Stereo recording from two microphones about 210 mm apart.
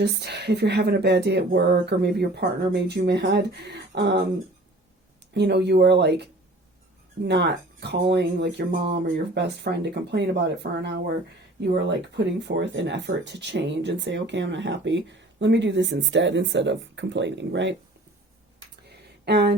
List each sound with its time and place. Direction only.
0.0 s speech: 50° right (ahead or behind)
5.3 s speech: 55° right (ahead or behind)
7.3 s speech: 55° right (ahead or behind)
18.9 s a sound: 50° right (ahead or behind)